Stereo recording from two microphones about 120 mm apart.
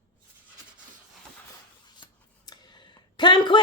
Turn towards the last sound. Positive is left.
turn(degrees=40)  # may be behind; listen again after turning